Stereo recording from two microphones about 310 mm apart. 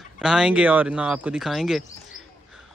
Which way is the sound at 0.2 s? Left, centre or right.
Centre.